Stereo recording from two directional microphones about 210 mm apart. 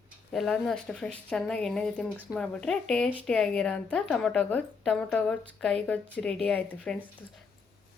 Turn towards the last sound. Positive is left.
turn(degrees=5)  # may be behind; listen again after turning